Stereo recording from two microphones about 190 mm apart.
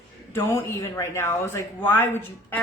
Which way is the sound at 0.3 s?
15° left (ahead or behind).